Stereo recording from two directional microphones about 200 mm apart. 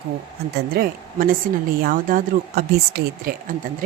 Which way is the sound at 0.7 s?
45° right (ahead or behind).